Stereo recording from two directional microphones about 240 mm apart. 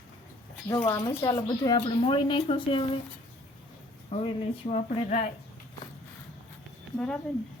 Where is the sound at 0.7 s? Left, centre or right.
Centre.